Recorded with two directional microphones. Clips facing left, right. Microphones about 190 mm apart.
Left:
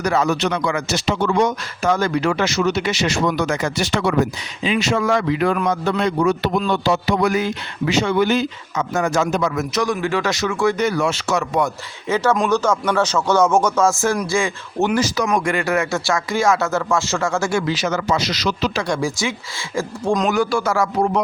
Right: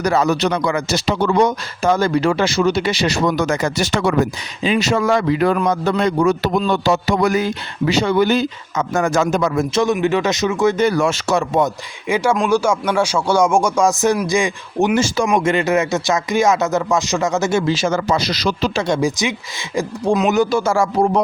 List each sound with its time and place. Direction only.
0.0 s speech: 35° right (ahead or behind)
9.6 s speech: 25° right (ahead or behind)
10.8 s speech: 45° right (ahead or behind)
11.3 s speech: 25° right (ahead or behind)
12.0 s speech: 10° right (ahead or behind)
15.0 s speech: 25° right (ahead or behind)
20.3 s speech: 20° right (ahead or behind)